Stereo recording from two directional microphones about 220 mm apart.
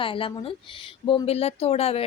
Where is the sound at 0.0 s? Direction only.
25° left (ahead or behind).